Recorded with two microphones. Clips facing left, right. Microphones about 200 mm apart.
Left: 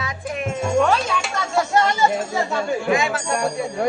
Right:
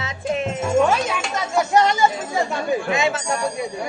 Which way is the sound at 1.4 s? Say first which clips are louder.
Right 2 dB; 15° right (ahead or behind).